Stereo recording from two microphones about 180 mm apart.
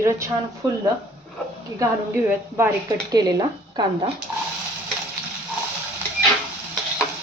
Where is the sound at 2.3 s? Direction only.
15° right (ahead or behind).